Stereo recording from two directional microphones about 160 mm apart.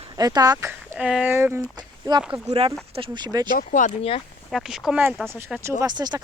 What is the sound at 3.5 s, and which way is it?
Speech, 50° left (ahead or behind).